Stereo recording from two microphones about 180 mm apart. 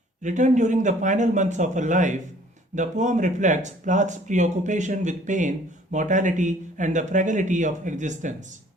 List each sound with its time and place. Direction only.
0.2 s speech: 45° right (ahead or behind)